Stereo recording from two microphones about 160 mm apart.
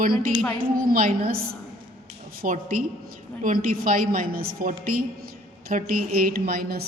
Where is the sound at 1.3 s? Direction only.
70° right (ahead or behind).